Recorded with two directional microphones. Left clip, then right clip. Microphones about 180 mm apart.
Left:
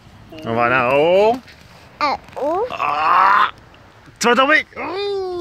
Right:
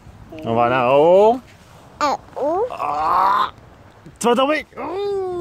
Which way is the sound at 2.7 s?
20° right (ahead or behind).